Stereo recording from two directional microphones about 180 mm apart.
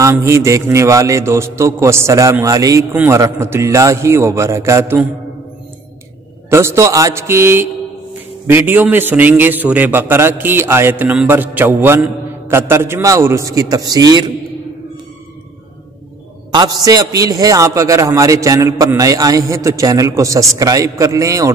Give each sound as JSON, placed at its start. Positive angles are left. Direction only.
{"t": 0.0, "sound": "a man's voice", "side_deg": -15}
{"t": 6.5, "sound": "a man's voice", "side_deg": -15}
{"t": 16.5, "sound": "a man's voice", "side_deg": -20}